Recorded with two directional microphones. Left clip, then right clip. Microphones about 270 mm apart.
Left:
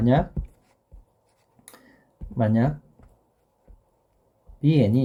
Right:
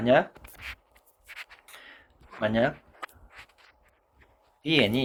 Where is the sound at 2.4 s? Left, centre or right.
Centre.